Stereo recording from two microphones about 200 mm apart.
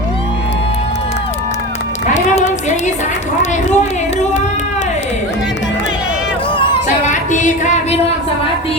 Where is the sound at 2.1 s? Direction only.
35° left (ahead or behind).